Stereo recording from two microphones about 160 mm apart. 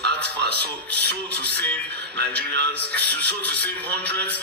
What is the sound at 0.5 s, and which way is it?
Speech, 10° left (ahead or behind).